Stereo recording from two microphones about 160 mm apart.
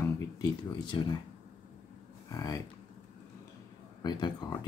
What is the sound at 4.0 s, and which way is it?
Speech, 25° left (ahead or behind).